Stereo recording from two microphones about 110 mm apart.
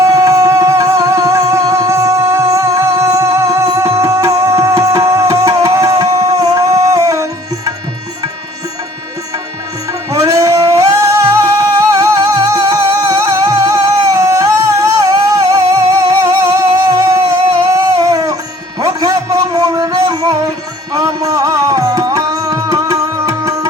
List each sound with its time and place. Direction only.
0.0 s music: 30° right (ahead or behind)
10.1 s music: 30° right (ahead or behind)
18.8 s a sound: 30° right (ahead or behind)
20.9 s music: 35° right (ahead or behind)